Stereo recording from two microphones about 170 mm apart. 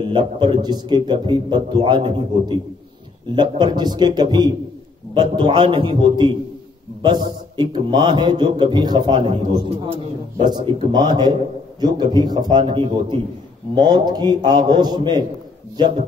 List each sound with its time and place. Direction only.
0.0 s a man's voice: 30° right (ahead or behind)